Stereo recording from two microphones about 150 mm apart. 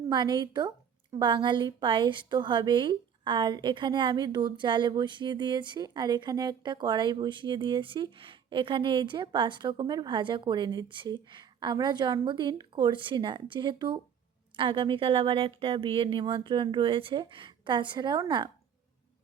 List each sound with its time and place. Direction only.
0.1 s a woman's voice: 30° right (ahead or behind)